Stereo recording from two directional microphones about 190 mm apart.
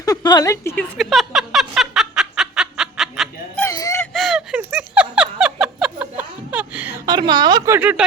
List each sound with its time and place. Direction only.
0.0 s a woman's voice: 20° left (ahead or behind)
0.9 s a sound: centre (ahead or behind)
3.6 s whimper: 15° left (ahead or behind)
4.1 s a sound: centre (ahead or behind)
5.5 s chuckle: 5° right (ahead or behind)
7.0 s a woman's voice: 20° right (ahead or behind)